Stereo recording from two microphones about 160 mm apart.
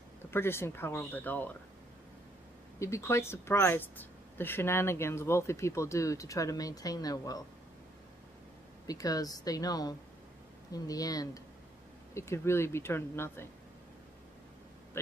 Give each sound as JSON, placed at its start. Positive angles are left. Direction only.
{"t": 0.3, "sound": "speech", "side_deg": 15}
{"t": 2.8, "sound": "speech", "side_deg": 15}
{"t": 8.8, "sound": "speech", "side_deg": 20}